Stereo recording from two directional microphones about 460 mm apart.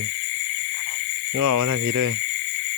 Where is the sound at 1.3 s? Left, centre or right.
Right.